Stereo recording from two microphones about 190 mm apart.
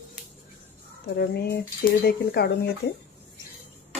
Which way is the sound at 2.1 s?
55° left (ahead or behind).